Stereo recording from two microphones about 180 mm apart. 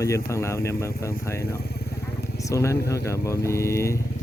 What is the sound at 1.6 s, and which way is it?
Vehicle, 65° left (ahead or behind).